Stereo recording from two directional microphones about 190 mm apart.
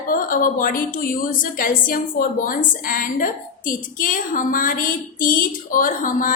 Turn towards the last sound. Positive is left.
turn(degrees=45)  # may be behind; listen again after turning